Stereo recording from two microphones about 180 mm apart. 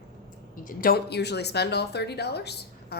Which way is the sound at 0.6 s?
55° left (ahead or behind).